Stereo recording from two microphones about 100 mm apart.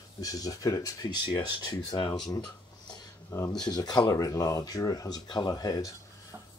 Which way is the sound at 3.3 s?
40° left (ahead or behind).